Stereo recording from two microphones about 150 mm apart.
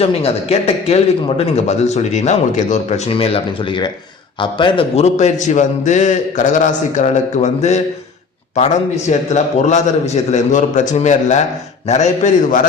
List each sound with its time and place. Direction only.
0.0 s a man's voice: 40° left (ahead or behind)
4.9 s speech: 50° left (ahead or behind)